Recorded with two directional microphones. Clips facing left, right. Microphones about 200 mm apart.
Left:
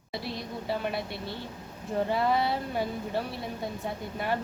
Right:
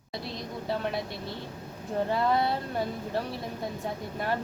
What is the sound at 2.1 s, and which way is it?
A woman's voice, centre (ahead or behind).